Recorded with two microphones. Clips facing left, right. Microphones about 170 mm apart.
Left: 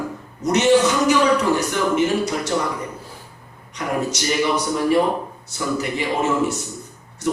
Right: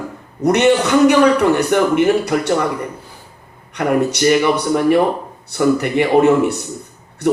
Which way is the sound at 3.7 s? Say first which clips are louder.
Right 8 dB; 60° right (ahead or behind).